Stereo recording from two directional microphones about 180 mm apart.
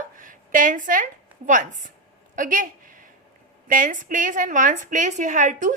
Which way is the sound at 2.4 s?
45° right (ahead or behind).